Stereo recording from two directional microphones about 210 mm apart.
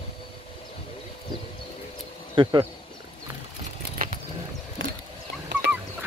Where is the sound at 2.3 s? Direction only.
20° right (ahead or behind).